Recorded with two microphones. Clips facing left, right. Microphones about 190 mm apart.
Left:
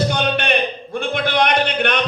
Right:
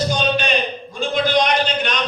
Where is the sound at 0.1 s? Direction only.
60° left (ahead or behind).